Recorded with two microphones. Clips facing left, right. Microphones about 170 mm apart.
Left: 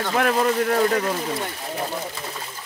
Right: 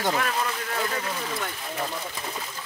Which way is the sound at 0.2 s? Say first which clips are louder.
Left 9 dB; 50° left (ahead or behind).